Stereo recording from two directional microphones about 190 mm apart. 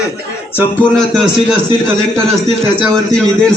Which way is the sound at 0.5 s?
10° left (ahead or behind).